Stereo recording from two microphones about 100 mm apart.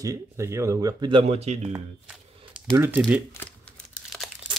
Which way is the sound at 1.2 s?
90° right.